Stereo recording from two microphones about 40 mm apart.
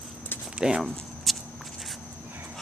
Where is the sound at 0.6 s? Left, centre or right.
Centre.